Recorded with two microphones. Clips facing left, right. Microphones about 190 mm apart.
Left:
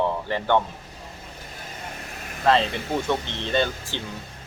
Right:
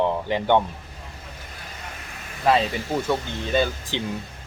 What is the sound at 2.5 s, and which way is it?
Speech, 10° right (ahead or behind).